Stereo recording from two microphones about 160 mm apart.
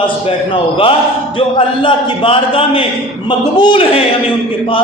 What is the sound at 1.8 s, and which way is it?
A man's voice, 35° left (ahead or behind).